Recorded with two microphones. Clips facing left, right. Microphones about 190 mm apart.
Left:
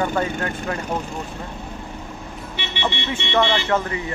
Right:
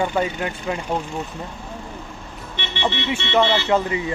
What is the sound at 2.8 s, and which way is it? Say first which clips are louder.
Speech: right 2 dB; 15° right (ahead or behind).